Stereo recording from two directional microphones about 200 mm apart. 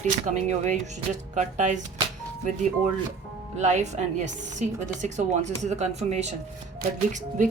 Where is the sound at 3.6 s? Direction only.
35° right (ahead or behind).